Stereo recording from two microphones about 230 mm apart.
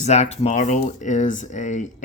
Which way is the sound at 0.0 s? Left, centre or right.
Left.